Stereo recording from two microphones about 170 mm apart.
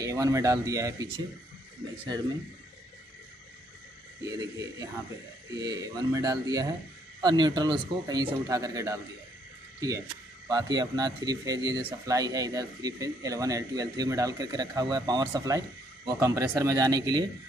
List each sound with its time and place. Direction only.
0.0 s a man's voice: 20° right (ahead or behind)
4.2 s a man's voice: 20° right (ahead or behind)